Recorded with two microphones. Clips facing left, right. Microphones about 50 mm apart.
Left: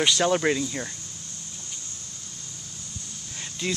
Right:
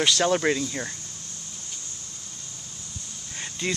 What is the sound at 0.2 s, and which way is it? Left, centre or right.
Speech, centre.